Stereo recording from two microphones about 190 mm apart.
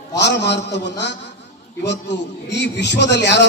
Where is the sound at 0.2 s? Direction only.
65° left (ahead or behind).